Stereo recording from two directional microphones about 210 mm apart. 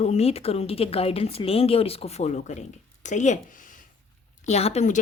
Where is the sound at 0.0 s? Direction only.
30° left (ahead or behind).